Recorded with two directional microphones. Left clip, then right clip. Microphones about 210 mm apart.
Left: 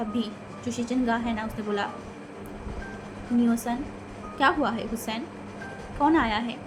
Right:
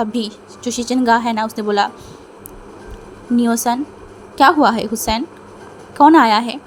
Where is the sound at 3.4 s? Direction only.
50° right (ahead or behind).